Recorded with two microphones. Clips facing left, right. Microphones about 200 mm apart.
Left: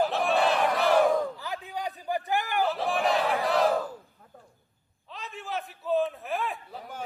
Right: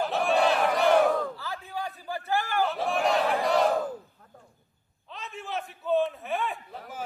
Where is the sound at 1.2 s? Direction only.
15° left (ahead or behind).